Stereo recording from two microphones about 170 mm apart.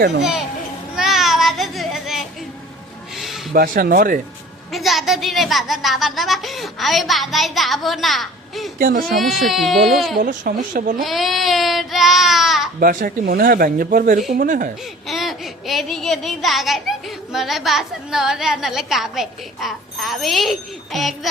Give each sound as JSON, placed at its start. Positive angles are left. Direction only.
{"t": 0.2, "sound": "a woman's voice", "side_deg": -5}
{"t": 0.9, "sound": "a sound", "side_deg": 0}
{"t": 3.5, "sound": "speech", "side_deg": -60}
{"t": 4.7, "sound": "a woman's voice", "side_deg": 0}
{"t": 8.8, "sound": "speech", "side_deg": -60}
{"t": 9.1, "sound": "a woman's voice", "side_deg": 0}
{"t": 10.2, "sound": "speech", "side_deg": -55}
{"t": 11.0, "sound": "child singing", "side_deg": 0}
{"t": 12.8, "sound": "speech", "side_deg": -55}
{"t": 15.0, "sound": "a child's voice", "side_deg": 0}